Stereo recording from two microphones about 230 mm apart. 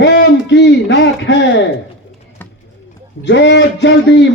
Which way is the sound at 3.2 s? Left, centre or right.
Left.